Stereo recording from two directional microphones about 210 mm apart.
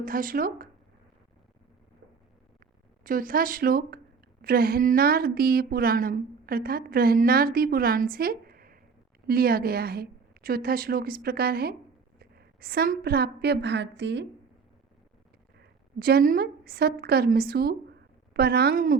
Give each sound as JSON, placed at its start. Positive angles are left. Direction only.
{"t": 0.0, "sound": "a woman's voice", "side_deg": -40}
{"t": 3.0, "sound": "a woman's voice", "side_deg": -40}
{"t": 15.5, "sound": "a woman's voice", "side_deg": -45}